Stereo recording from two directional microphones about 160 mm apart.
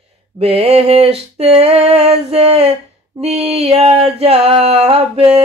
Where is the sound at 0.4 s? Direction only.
40° right (ahead or behind).